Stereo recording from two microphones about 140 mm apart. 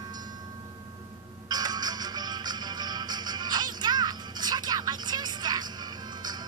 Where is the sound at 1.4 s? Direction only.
30° right (ahead or behind).